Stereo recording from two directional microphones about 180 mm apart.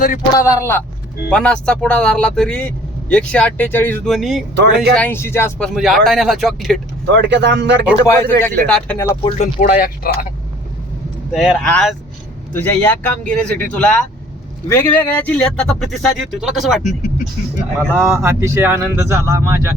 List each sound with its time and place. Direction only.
0.3 s speech: 15° left (ahead or behind); by 4.4 s centre (ahead or behind)
4.5 s speech: 65° right (ahead or behind)
4.9 s speech: 10° left (ahead or behind)
5.6 s speech: centre (ahead or behind)
7.2 s speech: 75° right (ahead or behind)
8.0 s speech: 10° left (ahead or behind)
9.4 s speech: 45° left (ahead or behind)
11.3 s speech: centre (ahead or behind)
17.7 s speech: 15° right (ahead or behind)